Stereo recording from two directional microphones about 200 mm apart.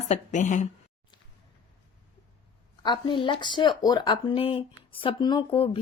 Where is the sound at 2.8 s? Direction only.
25° left (ahead or behind).